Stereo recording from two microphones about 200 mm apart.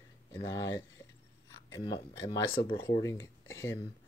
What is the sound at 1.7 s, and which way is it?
Speech, 20° left (ahead or behind).